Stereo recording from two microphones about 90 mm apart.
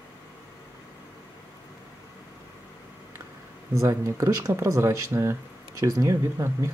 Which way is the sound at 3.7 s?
35° right (ahead or behind).